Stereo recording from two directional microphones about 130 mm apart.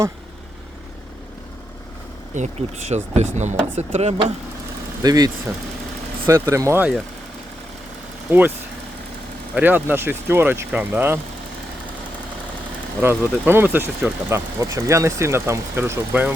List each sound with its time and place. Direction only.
2.3 s speech: 60° right (ahead or behind)
5.0 s speech: 30° right (ahead or behind)
8.3 s speech: 15° right (ahead or behind)
9.6 s speech: 15° right (ahead or behind)
13.0 s speech: 15° right (ahead or behind)